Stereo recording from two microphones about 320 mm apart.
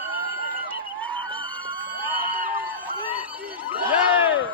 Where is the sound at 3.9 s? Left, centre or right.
Centre.